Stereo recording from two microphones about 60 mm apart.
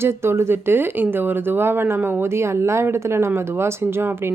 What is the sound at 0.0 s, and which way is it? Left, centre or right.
Speech, right.